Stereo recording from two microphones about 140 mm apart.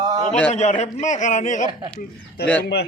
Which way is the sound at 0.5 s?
55° left (ahead or behind).